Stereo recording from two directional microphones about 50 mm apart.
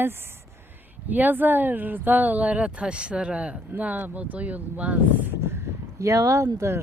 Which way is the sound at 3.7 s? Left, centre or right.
Right.